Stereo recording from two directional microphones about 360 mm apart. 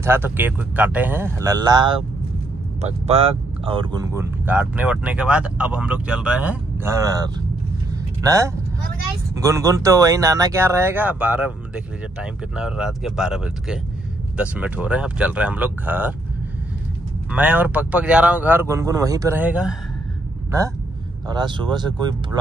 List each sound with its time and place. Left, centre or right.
0.0 s speech: centre
17.3 s speech: centre
21.3 s speech: centre